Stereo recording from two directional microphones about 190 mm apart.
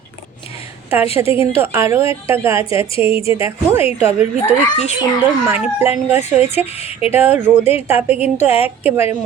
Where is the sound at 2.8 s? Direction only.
30° left (ahead or behind).